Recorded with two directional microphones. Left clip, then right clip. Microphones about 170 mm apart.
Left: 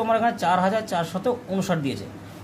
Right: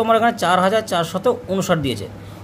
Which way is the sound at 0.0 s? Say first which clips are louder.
Right 5 dB; 40° right (ahead or behind).